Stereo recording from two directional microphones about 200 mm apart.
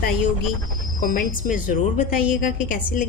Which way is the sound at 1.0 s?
40° left (ahead or behind).